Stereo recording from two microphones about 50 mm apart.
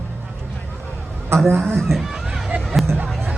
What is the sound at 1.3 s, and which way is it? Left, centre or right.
Speech, right.